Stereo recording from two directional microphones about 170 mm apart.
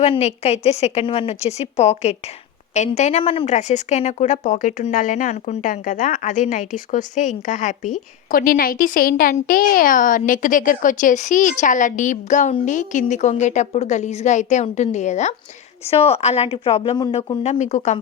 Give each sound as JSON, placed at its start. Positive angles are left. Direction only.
{"t": 0.0, "sound": "a woman's voice", "side_deg": 40}
{"t": 8.3, "sound": "a woman's voice", "side_deg": 60}